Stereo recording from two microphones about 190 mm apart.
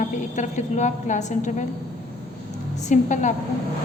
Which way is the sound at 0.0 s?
40° left (ahead or behind).